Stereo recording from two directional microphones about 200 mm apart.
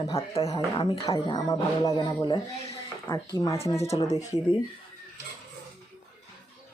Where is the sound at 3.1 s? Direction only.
10° left (ahead or behind).